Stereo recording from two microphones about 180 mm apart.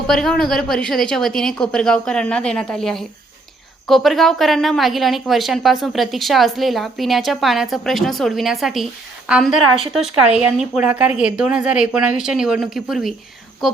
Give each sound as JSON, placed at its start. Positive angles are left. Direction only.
{"t": 0.1, "sound": "speech", "side_deg": 5}